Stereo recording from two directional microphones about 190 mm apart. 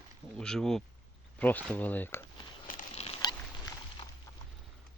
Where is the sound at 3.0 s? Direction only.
30° left (ahead or behind).